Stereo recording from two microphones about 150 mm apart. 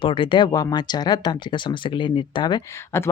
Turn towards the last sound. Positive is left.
turn(degrees=15)  # may be behind; listen again after turning